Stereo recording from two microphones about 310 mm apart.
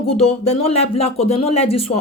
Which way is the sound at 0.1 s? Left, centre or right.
Left.